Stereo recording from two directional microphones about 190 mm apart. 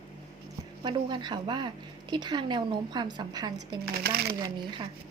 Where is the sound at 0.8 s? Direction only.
25° right (ahead or behind).